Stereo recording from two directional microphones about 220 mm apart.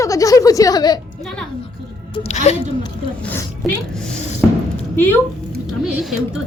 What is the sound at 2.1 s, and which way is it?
Speech, 30° left (ahead or behind).